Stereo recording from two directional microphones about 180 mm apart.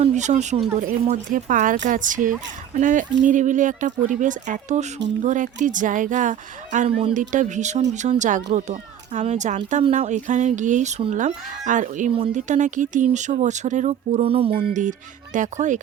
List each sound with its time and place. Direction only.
0.0 s speech: 40° right (ahead or behind)
14.7 s speech: 45° right (ahead or behind)